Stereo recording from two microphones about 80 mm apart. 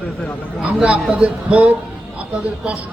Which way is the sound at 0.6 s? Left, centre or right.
Centre.